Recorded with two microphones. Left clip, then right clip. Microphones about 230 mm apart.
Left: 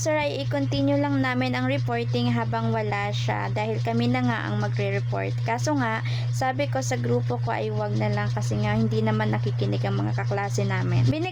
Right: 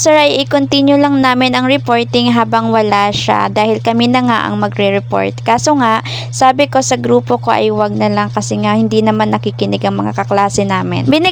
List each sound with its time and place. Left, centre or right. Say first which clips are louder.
0.0 s speech: right 16 dB; right